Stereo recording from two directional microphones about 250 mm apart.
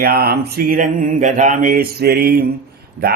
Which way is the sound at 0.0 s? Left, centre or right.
Right.